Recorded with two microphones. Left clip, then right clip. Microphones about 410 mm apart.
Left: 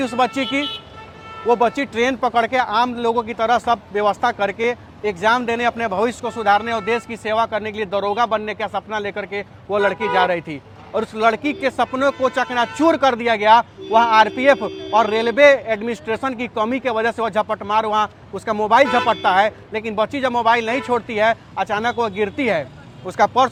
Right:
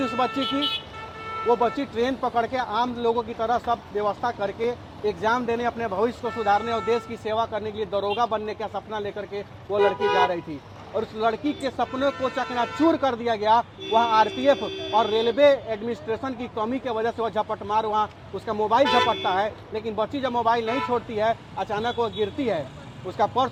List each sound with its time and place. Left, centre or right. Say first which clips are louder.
0.0 s a man's voice: left 5 dB; left